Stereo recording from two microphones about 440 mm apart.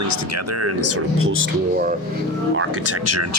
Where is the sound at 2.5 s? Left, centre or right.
Right.